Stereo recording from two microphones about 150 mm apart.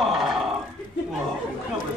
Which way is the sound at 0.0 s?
Centre (ahead or behind).